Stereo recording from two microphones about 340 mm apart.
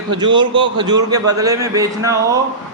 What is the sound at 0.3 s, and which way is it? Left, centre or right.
A man's voice, centre.